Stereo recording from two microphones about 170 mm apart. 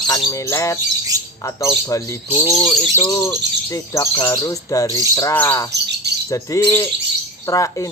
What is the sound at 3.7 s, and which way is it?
Speech, 20° left (ahead or behind).